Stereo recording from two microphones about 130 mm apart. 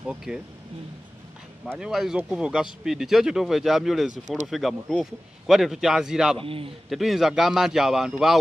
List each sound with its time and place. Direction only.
0.0 s speech: 5° right (ahead or behind)
1.8 s speech: 5° right (ahead or behind)
6.3 s a man's voice: 45° right (ahead or behind)
6.9 s speech: centre (ahead or behind)